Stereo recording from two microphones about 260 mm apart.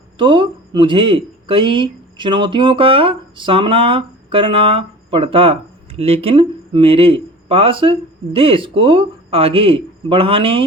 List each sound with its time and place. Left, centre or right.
0.2 s speech: centre